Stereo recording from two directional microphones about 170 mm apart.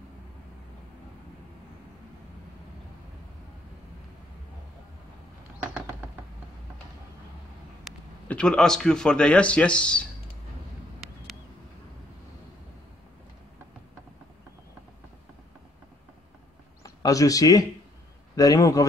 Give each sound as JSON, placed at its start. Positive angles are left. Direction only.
{"t": 5.6, "sound": "a sound", "side_deg": -10}
{"t": 7.8, "sound": "a man's voice", "side_deg": 5}
{"t": 16.8, "sound": "a man's voice", "side_deg": 20}